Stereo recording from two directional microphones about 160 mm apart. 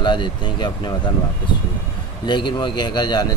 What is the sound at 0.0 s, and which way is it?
Speech, 30° left (ahead or behind).